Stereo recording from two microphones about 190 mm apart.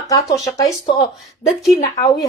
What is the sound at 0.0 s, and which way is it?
A woman's voice, 20° left (ahead or behind).